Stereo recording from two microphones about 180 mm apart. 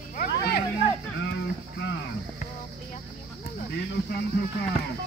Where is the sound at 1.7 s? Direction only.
90° left.